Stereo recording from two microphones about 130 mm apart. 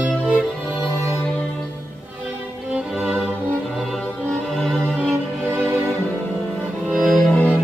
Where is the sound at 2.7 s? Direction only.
5° right (ahead or behind).